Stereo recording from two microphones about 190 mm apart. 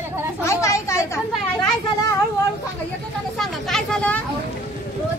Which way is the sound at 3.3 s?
5° left (ahead or behind).